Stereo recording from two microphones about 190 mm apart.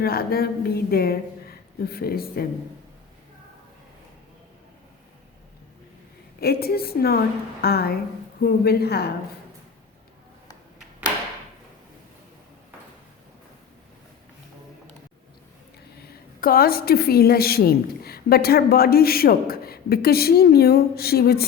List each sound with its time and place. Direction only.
0.0 s a woman's voice: 55° left (ahead or behind)
6.4 s a woman's voice: 55° left (ahead or behind)
16.4 s a woman's voice: 50° left (ahead or behind)